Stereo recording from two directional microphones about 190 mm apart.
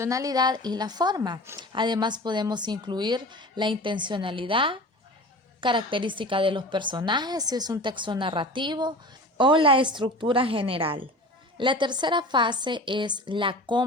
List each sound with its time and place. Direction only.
0.0 s a woman's voice: 15° right (ahead or behind)